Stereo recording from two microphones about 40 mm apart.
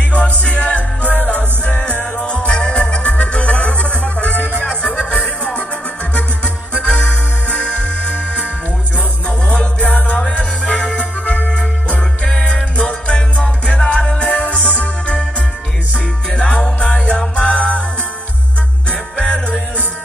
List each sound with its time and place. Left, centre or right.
0.1 s music: left
9.5 s music: left
10.6 s music: centre
11.0 s music: left
12.7 s music: left
16.3 s music: left
18.9 s music: left